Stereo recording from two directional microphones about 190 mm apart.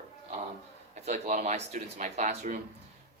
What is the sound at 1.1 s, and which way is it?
Speech, 35° right (ahead or behind).